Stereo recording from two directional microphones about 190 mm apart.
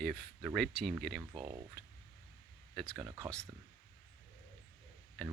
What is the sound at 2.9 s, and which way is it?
Speech, 15° right (ahead or behind).